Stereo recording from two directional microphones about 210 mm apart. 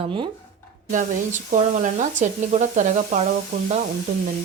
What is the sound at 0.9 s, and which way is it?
Speech, 35° right (ahead or behind).